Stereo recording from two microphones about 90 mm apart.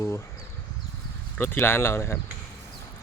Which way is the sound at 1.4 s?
25° left (ahead or behind).